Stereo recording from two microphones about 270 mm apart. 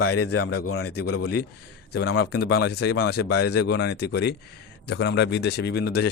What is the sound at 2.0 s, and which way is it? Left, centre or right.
Speech, left.